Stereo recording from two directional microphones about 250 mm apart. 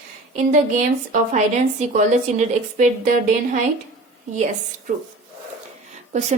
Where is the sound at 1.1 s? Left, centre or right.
Right.